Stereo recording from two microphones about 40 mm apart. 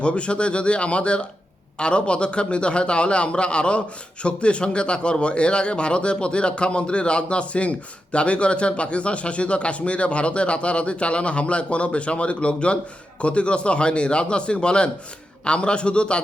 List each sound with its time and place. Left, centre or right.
0.0 s a man's voice: left